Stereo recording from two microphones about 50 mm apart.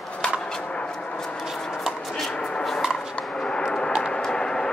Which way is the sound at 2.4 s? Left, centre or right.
Centre.